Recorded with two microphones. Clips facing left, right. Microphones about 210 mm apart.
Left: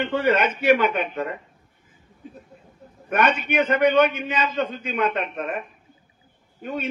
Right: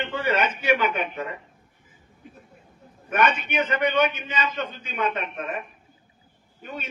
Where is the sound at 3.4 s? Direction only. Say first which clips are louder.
Left 5 dB; 55° left (ahead or behind).